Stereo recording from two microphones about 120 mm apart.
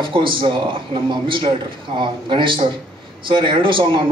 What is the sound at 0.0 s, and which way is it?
A man's voice, 45° right (ahead or behind).